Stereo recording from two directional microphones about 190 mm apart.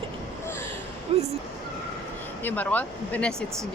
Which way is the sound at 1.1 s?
30° right (ahead or behind).